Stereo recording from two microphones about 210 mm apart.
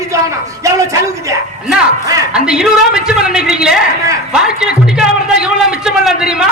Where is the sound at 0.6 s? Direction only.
15° right (ahead or behind).